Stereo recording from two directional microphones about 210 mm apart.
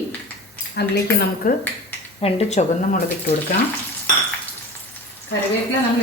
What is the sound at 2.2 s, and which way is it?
Speech, 35° left (ahead or behind).